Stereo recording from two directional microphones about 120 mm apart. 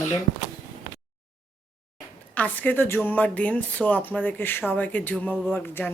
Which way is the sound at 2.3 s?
15° left (ahead or behind).